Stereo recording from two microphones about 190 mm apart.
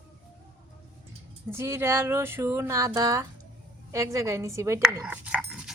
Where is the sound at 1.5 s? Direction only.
15° right (ahead or behind).